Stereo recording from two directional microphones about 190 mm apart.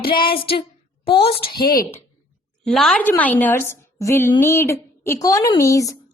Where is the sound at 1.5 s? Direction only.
50° left (ahead or behind).